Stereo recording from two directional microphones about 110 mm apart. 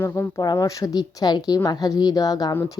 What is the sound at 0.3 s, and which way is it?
A woman's voice, 35° left (ahead or behind).